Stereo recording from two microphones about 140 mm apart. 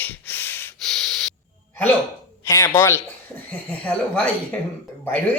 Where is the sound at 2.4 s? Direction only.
20° left (ahead or behind).